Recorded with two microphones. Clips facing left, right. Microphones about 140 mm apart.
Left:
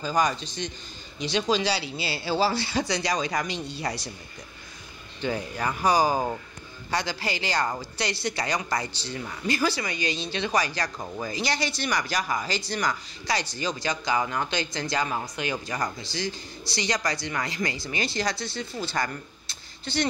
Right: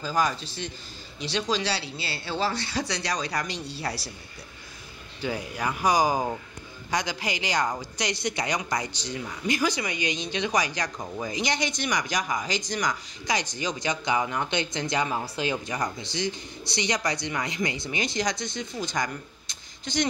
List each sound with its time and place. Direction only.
0.0 s speech: centre (ahead or behind)
5.2 s speech: 10° right (ahead or behind)
11.0 s speech: centre (ahead or behind)
11.2 s speech: 20° right (ahead or behind)